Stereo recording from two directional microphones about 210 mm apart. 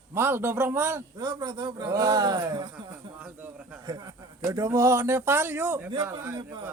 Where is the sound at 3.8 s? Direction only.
20° right (ahead or behind).